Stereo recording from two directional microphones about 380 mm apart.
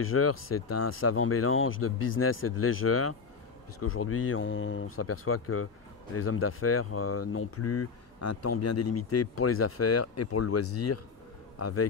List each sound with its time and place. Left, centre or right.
0.0 s a man's voice: left